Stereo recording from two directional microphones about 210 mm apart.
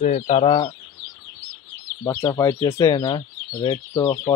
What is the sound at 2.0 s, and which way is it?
Speech, 10° left (ahead or behind).